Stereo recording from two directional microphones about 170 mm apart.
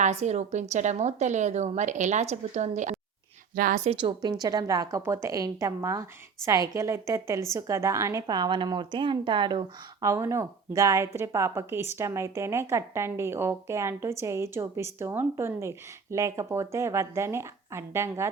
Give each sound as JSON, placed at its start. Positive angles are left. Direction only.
{"t": 0.0, "sound": "a woman's voice", "side_deg": -40}
{"t": 4.0, "sound": "a woman's voice", "side_deg": -25}